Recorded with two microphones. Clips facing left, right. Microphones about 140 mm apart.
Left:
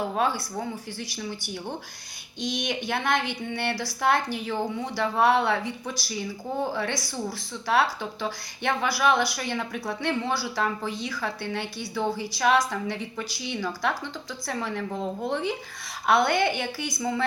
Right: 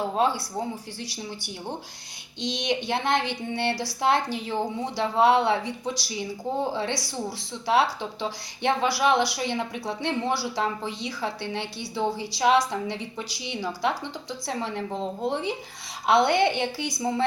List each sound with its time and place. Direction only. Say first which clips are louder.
0.1 s speech: right 2 dB; 25° right (ahead or behind)